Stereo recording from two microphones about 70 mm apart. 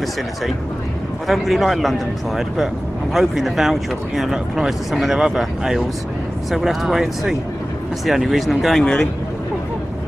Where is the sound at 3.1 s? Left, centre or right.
Centre.